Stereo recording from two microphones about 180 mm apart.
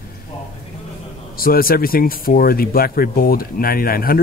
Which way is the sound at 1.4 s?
55° left (ahead or behind).